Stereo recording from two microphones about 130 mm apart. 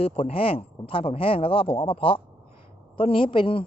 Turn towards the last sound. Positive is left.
turn(degrees=45)  # may be behind; listen again after turning